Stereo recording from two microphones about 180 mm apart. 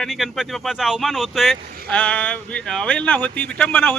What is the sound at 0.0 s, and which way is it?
Speech, centre (ahead or behind).